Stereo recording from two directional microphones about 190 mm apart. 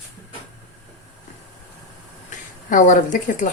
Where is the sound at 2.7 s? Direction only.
45° left (ahead or behind).